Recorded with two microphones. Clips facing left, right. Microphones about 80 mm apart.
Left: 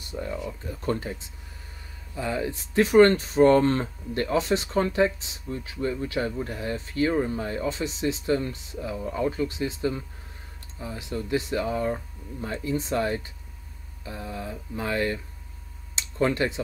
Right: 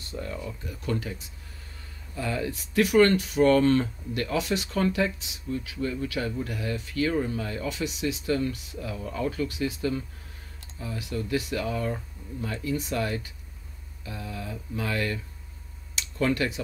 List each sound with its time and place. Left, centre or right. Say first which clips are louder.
0.0 s speech: left 3 dB; centre
0.7 s speech: left 2 dB; left
15.9 s a sound: left 1 dB; left